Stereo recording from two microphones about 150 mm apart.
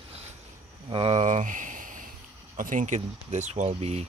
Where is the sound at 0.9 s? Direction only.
40° right (ahead or behind).